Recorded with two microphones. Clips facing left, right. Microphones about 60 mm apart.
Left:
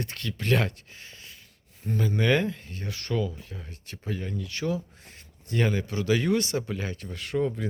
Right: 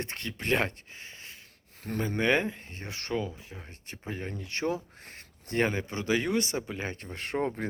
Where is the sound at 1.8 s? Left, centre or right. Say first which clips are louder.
Left 3 dB; right.